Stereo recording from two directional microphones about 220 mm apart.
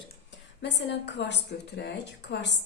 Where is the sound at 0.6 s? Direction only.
50° left (ahead or behind).